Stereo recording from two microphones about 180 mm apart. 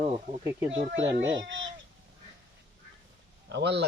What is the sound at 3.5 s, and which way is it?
Speech, 70° right (ahead or behind).